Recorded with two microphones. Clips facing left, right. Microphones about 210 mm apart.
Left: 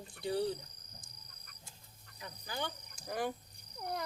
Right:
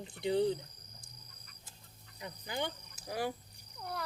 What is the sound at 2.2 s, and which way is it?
Cricket, 20° right (ahead or behind).